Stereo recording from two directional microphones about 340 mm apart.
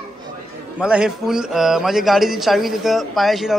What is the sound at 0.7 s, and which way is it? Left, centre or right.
A man's voice, centre.